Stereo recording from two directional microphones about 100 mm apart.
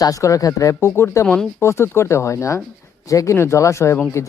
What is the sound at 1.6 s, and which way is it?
Speech, 25° left (ahead or behind).